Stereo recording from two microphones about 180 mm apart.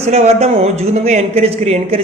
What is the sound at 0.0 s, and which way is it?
Speech, 35° right (ahead or behind).